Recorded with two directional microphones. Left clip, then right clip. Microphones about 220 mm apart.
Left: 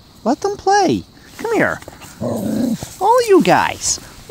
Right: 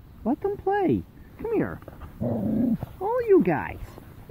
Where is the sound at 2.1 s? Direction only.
20° left (ahead or behind).